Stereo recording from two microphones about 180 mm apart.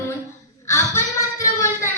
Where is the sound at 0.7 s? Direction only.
15° left (ahead or behind).